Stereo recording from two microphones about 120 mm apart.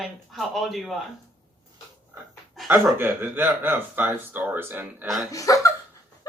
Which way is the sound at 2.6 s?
Centre (ahead or behind).